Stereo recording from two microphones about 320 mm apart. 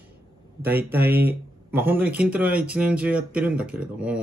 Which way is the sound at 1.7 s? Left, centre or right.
Centre.